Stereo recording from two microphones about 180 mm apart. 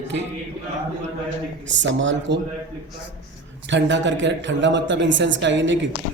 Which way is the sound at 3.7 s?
90° right.